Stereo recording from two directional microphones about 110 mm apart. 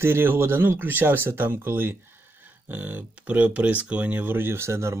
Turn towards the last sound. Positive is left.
turn(degrees=-25)  # may be behind; listen again after turning